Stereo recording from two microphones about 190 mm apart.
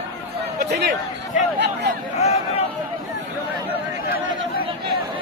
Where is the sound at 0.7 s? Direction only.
60° right (ahead or behind).